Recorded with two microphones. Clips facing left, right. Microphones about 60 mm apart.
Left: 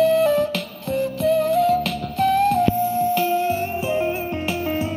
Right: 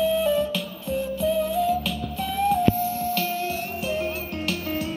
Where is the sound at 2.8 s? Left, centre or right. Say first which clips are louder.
Left 6 dB; left.